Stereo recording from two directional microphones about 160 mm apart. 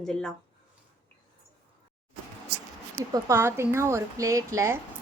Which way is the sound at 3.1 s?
15° right (ahead or behind).